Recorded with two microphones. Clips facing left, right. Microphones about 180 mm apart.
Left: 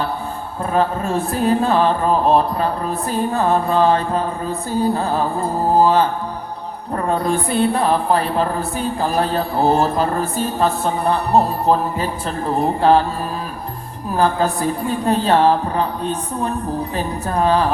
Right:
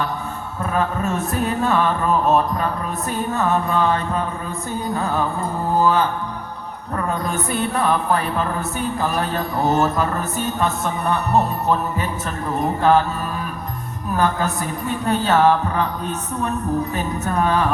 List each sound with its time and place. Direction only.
0.6 s speech: 30° left (ahead or behind)
14.2 s speech: 30° left (ahead or behind)